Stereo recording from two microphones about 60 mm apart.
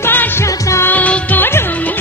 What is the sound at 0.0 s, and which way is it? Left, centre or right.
Music, left.